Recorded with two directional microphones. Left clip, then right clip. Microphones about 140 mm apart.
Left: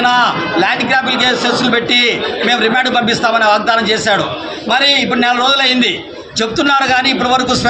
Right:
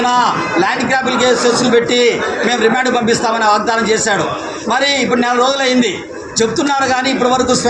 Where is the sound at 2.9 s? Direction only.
35° left (ahead or behind).